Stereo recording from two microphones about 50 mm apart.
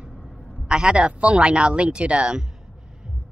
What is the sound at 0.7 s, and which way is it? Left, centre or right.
Speech, centre.